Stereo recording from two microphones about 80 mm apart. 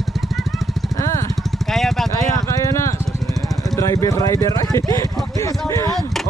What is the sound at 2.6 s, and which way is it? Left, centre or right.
Vehicle, left.